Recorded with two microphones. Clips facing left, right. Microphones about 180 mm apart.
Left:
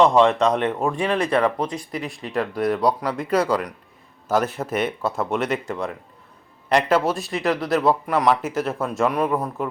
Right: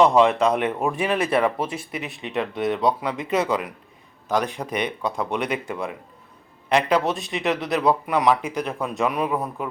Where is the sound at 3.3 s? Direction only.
20° right (ahead or behind).